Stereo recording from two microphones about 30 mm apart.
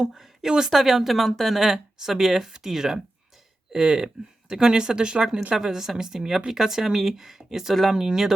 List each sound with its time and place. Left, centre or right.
0.0 s speech: centre
5.6 s speech: centre
7.9 s speech: centre